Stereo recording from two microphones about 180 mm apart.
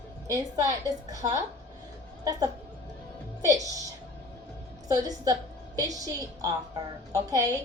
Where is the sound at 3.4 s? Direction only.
20° right (ahead or behind).